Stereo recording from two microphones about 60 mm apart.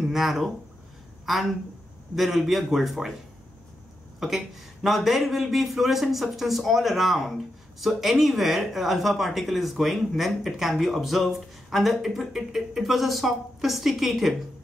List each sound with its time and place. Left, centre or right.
0.0 s speech: centre
2.1 s speech: centre
4.2 s speech: centre